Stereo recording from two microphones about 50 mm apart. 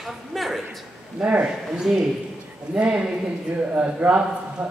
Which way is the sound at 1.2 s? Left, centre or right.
Right.